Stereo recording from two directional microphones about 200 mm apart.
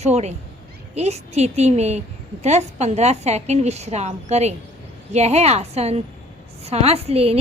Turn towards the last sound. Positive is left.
turn(degrees=-30)  # may be behind; listen again after turning